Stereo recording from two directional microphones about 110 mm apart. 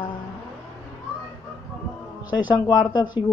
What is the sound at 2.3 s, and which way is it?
Speech, 40° left (ahead or behind).